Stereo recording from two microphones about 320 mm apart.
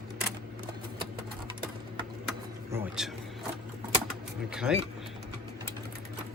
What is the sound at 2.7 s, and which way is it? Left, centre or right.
Vehicle, centre.